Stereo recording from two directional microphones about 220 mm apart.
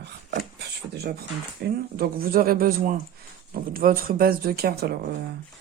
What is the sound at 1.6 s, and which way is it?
Speech, 50° right (ahead or behind).